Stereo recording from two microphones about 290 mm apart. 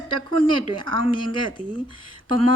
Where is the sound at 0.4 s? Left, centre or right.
Centre.